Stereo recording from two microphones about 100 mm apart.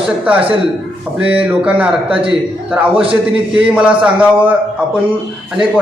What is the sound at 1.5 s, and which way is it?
A man's voice, 10° right (ahead or behind).